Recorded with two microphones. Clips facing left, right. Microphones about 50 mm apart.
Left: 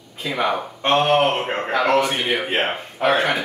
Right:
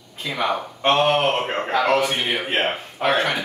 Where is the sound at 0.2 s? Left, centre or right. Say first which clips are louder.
Left 2 dB; centre.